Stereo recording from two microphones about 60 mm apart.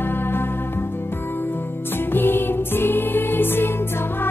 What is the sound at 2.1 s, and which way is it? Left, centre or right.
Music, left.